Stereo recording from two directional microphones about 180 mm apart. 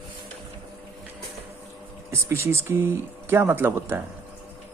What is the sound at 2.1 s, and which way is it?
Speech, 15° right (ahead or behind).